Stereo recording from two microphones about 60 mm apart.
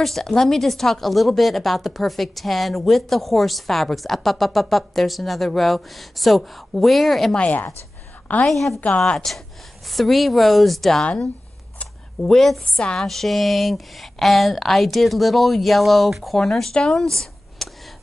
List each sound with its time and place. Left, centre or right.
0.0 s speech: centre
7.3 s a woman's voice: left
8.5 s speech: centre
8.8 s a woman's voice: centre
9.8 s speech: centre
11.8 s camera: centre
12.6 s a woman's voice: centre
13.0 s speech: centre